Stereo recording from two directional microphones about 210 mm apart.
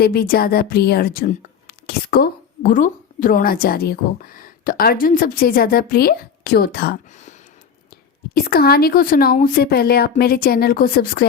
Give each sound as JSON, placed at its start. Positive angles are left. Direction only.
{"t": 0.0, "sound": "a woman's voice", "side_deg": 45}
{"t": 8.3, "sound": "a woman's voice", "side_deg": 45}